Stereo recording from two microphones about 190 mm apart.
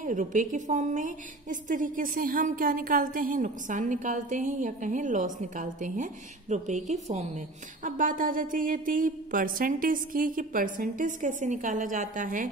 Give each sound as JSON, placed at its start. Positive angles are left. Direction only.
{"t": 0.0, "sound": "a woman's voice", "side_deg": -40}